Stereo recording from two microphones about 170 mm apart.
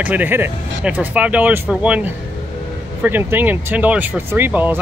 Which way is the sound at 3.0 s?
10° right (ahead or behind).